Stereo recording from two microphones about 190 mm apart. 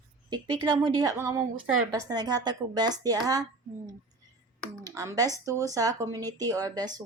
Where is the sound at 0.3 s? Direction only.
20° right (ahead or behind).